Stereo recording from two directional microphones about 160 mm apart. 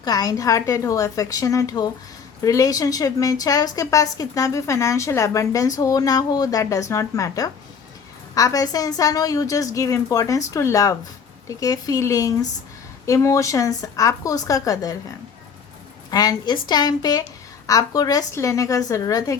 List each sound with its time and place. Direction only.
0.0 s a woman's voice: 25° left (ahead or behind)
16.0 s a woman's voice: 25° left (ahead or behind)